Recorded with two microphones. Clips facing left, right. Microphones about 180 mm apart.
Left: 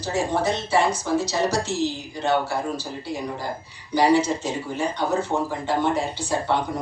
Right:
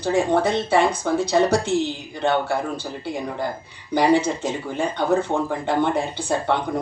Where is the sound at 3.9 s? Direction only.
55° right (ahead or behind).